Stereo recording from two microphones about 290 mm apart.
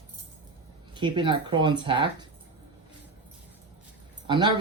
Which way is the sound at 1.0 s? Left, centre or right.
Centre.